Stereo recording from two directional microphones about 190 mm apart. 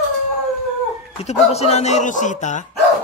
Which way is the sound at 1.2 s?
35° left (ahead or behind).